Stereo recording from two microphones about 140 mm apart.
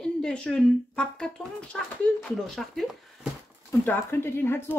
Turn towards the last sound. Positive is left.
turn(degrees=15)  # may be behind; listen again after turning